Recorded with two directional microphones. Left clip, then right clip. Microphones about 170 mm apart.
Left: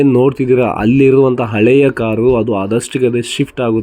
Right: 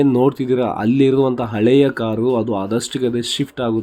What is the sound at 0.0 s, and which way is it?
Speech, 15° left (ahead or behind).